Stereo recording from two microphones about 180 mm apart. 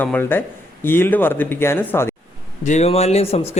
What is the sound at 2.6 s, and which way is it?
Speech, 40° left (ahead or behind).